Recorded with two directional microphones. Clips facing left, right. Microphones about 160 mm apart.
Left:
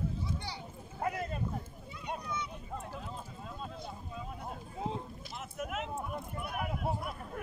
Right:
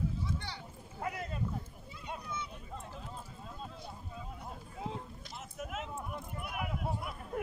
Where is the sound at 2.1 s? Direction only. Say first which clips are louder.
Left 3 dB; 65° left (ahead or behind).